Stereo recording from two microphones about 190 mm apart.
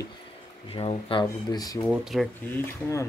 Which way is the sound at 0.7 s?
30° left (ahead or behind).